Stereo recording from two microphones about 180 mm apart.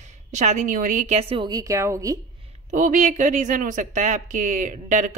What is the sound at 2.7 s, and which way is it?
Speech, 45° right (ahead or behind).